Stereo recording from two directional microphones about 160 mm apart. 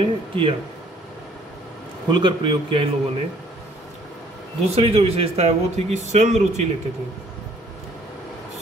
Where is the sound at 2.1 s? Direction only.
30° right (ahead or behind).